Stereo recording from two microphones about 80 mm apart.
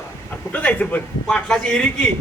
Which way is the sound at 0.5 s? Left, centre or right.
Centre.